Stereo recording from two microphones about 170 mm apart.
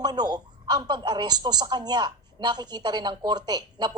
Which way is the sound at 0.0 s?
25° right (ahead or behind).